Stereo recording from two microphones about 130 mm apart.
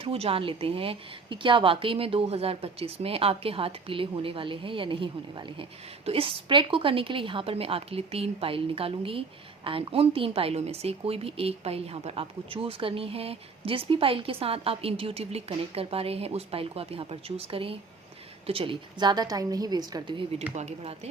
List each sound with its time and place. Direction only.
0.0 s a woman's voice: 50° right (ahead or behind)
20.5 s speech: 55° right (ahead or behind)